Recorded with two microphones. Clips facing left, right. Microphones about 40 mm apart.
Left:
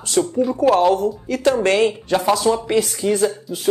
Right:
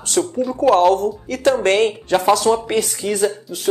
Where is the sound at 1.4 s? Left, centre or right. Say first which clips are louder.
Right 1 dB; right.